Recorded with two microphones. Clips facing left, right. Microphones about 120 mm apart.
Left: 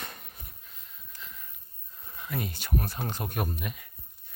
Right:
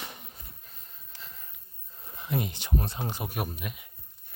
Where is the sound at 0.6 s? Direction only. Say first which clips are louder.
Even; 40° right (ahead or behind).